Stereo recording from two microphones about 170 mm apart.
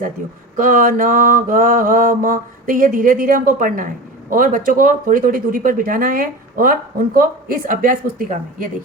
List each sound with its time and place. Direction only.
0.6 s mantra: 50° right (ahead or behind)